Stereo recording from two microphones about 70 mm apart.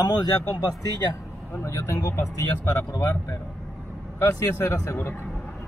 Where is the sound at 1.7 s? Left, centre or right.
Left.